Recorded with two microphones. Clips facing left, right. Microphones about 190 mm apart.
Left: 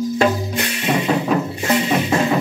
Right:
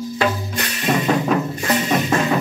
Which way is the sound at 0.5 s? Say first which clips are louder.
Left 1 dB; 15° left (ahead or behind).